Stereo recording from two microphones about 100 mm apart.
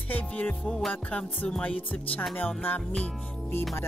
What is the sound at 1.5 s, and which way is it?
Speech, 15° left (ahead or behind).